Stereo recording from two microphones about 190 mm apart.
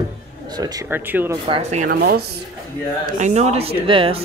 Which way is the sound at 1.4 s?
35° right (ahead or behind).